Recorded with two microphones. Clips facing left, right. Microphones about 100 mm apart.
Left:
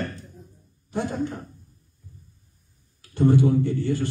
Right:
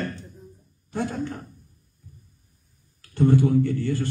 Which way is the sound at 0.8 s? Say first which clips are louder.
Even; 15° left (ahead or behind).